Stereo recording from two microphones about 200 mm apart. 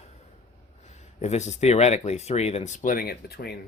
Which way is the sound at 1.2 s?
35° left (ahead or behind).